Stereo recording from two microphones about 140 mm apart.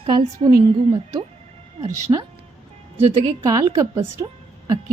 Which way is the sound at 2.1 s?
25° right (ahead or behind).